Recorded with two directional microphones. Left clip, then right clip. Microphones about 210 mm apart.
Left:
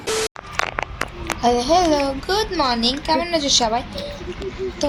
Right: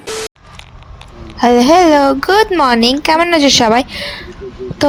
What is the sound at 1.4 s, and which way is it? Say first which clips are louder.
Speech: right 9 dB; 45° right (ahead or behind).